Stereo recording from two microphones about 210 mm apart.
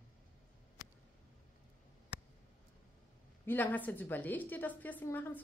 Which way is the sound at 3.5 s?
10° left (ahead or behind).